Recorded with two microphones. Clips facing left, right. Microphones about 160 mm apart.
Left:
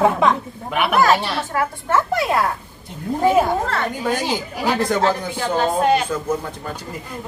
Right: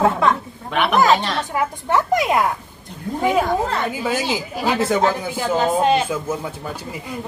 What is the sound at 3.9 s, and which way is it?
Speech, 5° right (ahead or behind).